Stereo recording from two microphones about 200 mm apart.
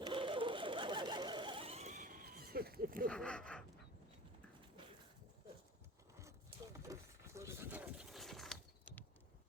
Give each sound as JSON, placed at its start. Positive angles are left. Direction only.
{"t": 0.0, "sound": "sewing machine", "side_deg": -25}
{"t": 3.1, "sound": "speech", "side_deg": 5}
{"t": 6.7, "sound": "a sound", "side_deg": -15}